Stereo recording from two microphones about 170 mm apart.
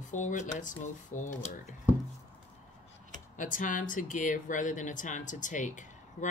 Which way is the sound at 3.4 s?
50° left (ahead or behind).